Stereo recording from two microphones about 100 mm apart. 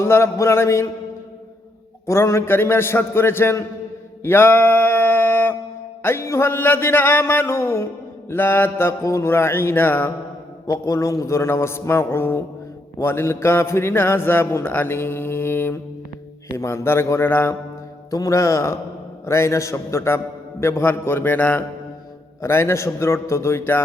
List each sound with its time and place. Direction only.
0.0 s a man's voice: 30° left (ahead or behind)
2.0 s a man's voice: 25° left (ahead or behind)
4.2 s mantra: 20° left (ahead or behind)
6.0 s a man's voice: 25° left (ahead or behind)
10.7 s a man's voice: 30° left (ahead or behind)
18.1 s a man's voice: 35° left (ahead or behind)